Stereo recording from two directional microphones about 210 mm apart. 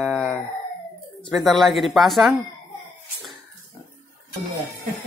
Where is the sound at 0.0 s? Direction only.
5° left (ahead or behind).